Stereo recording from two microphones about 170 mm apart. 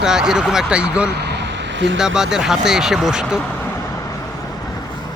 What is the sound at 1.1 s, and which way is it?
Vehicle, 85° right.